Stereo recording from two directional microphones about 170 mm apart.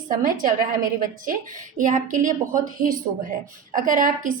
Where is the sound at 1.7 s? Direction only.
50° right (ahead or behind).